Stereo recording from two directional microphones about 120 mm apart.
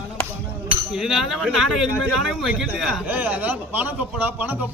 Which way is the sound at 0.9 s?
5° right (ahead or behind).